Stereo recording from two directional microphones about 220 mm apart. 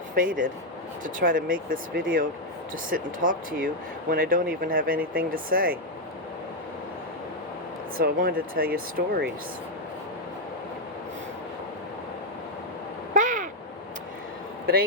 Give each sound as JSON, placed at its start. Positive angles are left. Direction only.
{"t": 0.2, "sound": "speech", "side_deg": -40}
{"t": 7.9, "sound": "speech", "side_deg": -40}
{"t": 13.1, "sound": "a sound", "side_deg": -35}